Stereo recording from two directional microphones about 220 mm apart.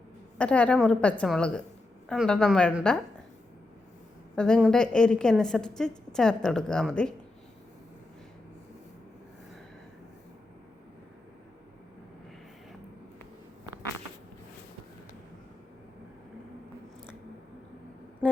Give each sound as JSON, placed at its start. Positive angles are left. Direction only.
{"t": 0.3, "sound": "a woman's voice", "side_deg": 5}
{"t": 4.4, "sound": "a woman's voice", "side_deg": 5}